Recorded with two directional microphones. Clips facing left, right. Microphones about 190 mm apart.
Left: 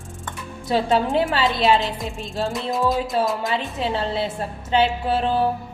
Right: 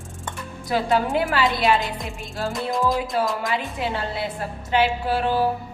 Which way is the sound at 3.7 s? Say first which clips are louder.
Left 3 dB; 25° left (ahead or behind).